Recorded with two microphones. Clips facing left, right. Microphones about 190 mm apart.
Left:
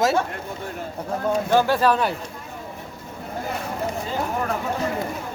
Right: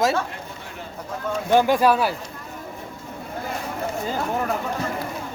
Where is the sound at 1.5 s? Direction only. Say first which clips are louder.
Right 3 dB; 15° right (ahead or behind).